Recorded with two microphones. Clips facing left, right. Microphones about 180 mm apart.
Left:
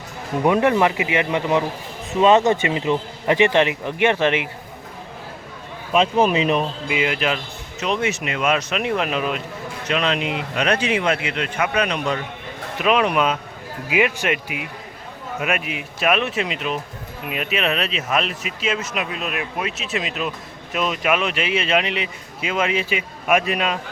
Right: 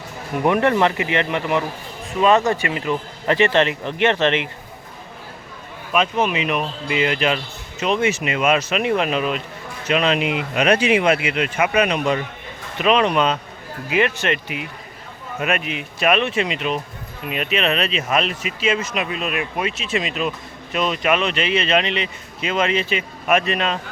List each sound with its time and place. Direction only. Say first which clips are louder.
0.4 s speech: even; 15° left (ahead or behind)
5.9 s speech: left 3 dB; 30° left (ahead or behind)
6.8 s speech: right 2 dB; 5° left (ahead or behind); by 12.2 s 10° right (ahead or behind)
12.8 s speech: right 1 dB; 5° left (ahead or behind)